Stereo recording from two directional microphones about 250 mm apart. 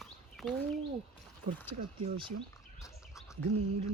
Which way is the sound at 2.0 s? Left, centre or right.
Centre.